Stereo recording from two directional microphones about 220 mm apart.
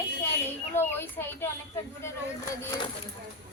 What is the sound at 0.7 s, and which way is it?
Speech, 10° left (ahead or behind).